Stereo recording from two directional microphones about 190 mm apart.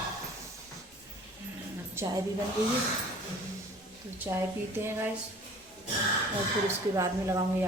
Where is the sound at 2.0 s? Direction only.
10° right (ahead or behind).